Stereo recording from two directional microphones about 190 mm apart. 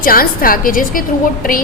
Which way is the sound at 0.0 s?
50° left (ahead or behind).